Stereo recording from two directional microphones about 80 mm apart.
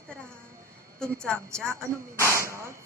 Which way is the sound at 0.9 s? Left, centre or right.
Centre.